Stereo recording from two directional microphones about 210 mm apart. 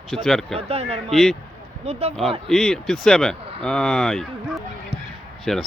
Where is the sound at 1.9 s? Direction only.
30° right (ahead or behind).